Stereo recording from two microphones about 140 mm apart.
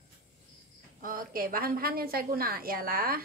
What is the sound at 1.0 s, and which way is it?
A woman's voice, 90° right.